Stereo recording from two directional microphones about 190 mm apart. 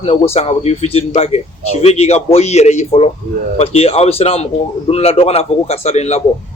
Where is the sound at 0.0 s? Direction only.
30° left (ahead or behind).